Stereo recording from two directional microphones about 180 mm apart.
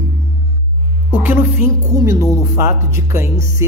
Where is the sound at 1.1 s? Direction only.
10° right (ahead or behind).